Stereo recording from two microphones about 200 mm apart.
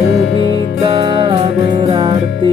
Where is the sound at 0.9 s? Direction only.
20° right (ahead or behind).